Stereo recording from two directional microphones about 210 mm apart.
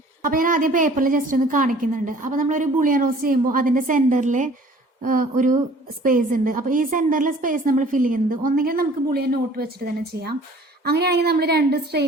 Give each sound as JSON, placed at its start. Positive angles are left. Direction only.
{"t": 0.2, "sound": "a woman's voice", "side_deg": -40}
{"t": 10.8, "sound": "a woman's voice", "side_deg": -50}